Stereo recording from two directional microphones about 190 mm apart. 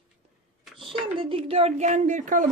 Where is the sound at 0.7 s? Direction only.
25° right (ahead or behind).